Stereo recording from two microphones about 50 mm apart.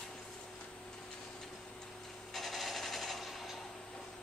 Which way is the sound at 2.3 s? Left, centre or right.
Centre.